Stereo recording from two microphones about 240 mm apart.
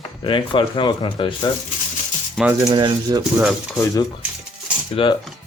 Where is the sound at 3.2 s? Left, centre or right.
Centre.